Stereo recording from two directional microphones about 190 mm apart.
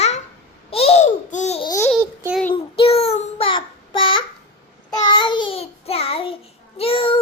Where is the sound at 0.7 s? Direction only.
30° left (ahead or behind).